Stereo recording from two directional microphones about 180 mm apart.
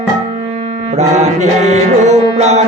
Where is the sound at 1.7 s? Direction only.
40° right (ahead or behind).